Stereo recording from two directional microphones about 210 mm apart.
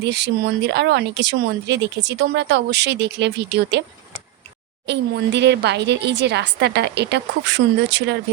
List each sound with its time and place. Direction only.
0.0 s speech: 55° right (ahead or behind)
4.9 s speech: 55° right (ahead or behind)